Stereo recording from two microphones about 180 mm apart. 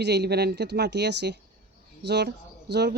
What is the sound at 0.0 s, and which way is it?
Speech, 65° right (ahead or behind).